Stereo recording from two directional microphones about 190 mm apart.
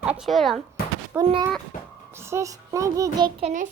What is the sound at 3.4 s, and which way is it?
Speech, 40° right (ahead or behind).